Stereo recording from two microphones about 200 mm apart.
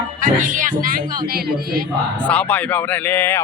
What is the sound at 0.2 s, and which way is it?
Speech, 40° right (ahead or behind).